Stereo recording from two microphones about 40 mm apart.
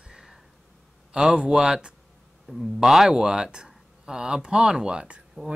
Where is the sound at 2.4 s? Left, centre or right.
Centre.